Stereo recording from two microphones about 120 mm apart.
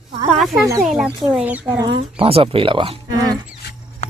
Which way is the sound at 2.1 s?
50° right (ahead or behind).